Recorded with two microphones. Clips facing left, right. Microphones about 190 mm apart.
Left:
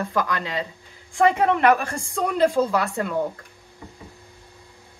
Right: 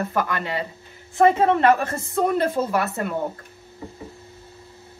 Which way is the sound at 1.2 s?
20° right (ahead or behind).